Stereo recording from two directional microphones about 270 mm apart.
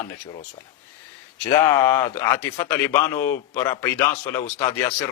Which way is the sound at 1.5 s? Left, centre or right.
Centre.